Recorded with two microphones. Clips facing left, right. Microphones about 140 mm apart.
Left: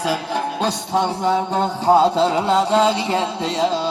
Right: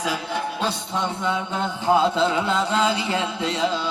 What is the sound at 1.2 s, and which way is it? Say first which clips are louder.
Mantra: left 6 dB; 35° left (ahead or behind).